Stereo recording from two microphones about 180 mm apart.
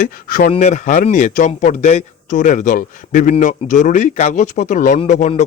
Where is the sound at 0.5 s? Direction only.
40° left (ahead or behind).